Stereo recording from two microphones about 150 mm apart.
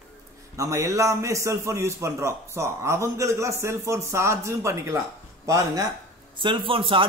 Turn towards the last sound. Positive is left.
turn(degrees=-35)  # may be behind; listen again after turning